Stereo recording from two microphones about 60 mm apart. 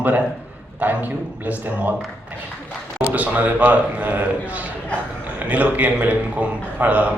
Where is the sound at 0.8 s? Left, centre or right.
Right.